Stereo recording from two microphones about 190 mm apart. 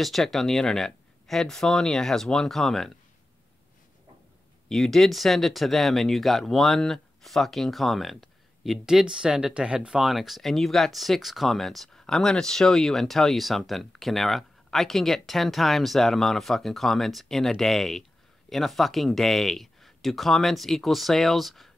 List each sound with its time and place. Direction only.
0.0 s speech: centre (ahead or behind)
4.6 s speech: centre (ahead or behind)